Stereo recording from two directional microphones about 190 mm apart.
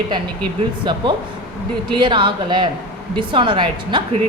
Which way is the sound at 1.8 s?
25° right (ahead or behind).